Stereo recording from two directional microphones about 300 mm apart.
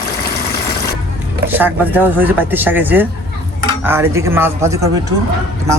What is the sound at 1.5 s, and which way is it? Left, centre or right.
A man's voice, centre.